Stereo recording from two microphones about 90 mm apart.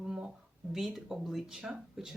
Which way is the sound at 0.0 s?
5° right (ahead or behind).